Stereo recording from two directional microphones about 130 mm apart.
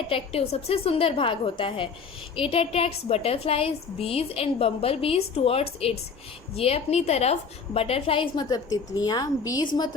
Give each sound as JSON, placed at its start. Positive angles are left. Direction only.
{"t": 0.1, "sound": "a woman's voice", "side_deg": 45}